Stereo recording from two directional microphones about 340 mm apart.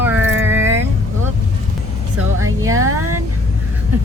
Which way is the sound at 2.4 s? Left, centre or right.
Right.